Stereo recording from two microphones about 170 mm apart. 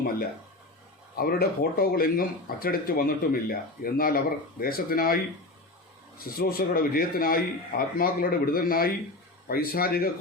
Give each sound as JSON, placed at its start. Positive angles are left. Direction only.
{"t": 1.1, "sound": "speech", "side_deg": 60}
{"t": 6.4, "sound": "speech", "side_deg": 60}